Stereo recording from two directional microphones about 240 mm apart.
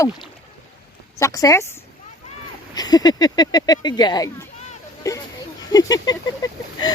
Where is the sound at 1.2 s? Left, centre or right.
Centre.